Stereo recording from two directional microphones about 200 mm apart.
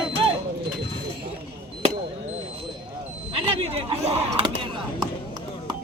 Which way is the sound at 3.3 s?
25° right (ahead or behind).